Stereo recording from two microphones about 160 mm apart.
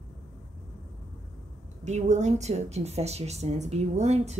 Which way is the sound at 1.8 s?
45° right (ahead or behind).